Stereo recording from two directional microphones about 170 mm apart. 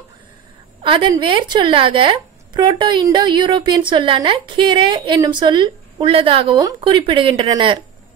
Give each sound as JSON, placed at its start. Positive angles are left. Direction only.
{"t": 0.8, "sound": "speech", "side_deg": -30}